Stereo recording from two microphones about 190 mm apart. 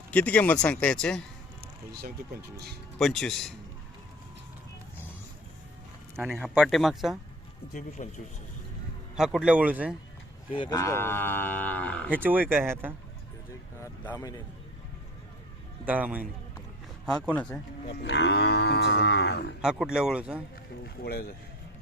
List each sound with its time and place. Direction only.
0.1 s livestock: 5° left (ahead or behind)
1.9 s speech: 55° right (ahead or behind)
3.0 s speech: centre (ahead or behind)
6.1 s speech: centre (ahead or behind)
7.7 s speech: 40° left (ahead or behind)
9.1 s speech: 5° right (ahead or behind)
10.6 s livestock: 20° left (ahead or behind)
12.1 s speech: 10° right (ahead or behind)
13.8 s speech: 15° left (ahead or behind)
15.9 s speech: 10° right (ahead or behind)
17.1 s livestock: 5° left (ahead or behind)
17.8 s livestock: 65° left (ahead or behind)
19.6 s speech: 5° right (ahead or behind)
20.8 s livestock: 55° left (ahead or behind)